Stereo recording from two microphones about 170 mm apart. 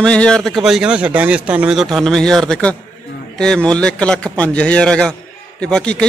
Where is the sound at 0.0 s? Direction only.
5° left (ahead or behind).